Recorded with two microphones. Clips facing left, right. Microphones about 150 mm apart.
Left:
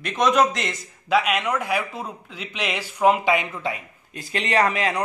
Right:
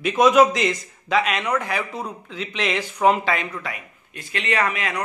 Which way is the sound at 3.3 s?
25° left (ahead or behind).